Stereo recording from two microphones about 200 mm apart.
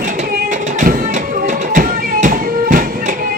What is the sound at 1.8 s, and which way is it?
Music, 45° right (ahead or behind).